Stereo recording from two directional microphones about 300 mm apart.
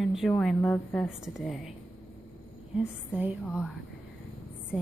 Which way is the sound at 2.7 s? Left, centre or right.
Centre.